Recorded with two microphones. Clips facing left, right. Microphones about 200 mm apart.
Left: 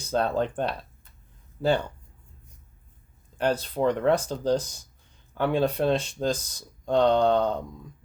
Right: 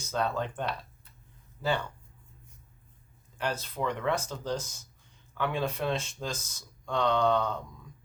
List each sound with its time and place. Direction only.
0.0 s speech: 30° left (ahead or behind)
3.4 s speech: 35° left (ahead or behind)